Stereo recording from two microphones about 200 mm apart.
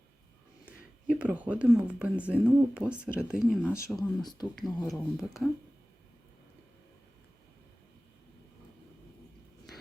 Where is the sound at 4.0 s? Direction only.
20° left (ahead or behind).